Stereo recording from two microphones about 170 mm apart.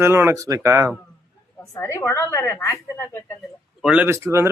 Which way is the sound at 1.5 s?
15° left (ahead or behind).